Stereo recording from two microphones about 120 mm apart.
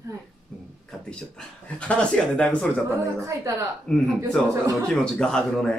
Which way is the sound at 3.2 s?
25° right (ahead or behind).